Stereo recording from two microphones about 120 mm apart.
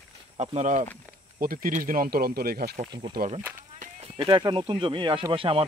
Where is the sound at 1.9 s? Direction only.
90° right.